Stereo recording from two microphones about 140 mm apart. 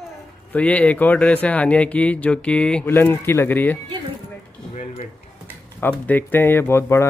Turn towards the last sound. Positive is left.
turn(degrees=20)  # may be behind; listen again after turning